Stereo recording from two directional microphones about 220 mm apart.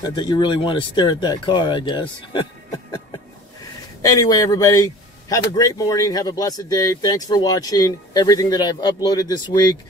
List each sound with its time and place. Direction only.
0.0 s a man's voice: 20° left (ahead or behind)